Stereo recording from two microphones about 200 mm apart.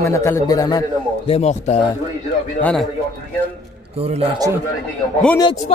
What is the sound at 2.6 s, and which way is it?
Speech, 5° left (ahead or behind).